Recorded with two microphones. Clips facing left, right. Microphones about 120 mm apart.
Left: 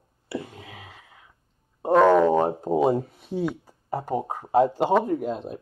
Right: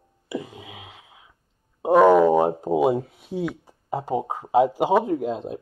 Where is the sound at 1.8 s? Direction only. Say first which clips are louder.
Right 2 dB; 10° right (ahead or behind).